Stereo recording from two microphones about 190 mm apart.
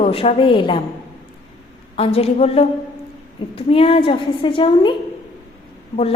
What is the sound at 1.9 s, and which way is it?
A woman's voice, 30° left (ahead or behind).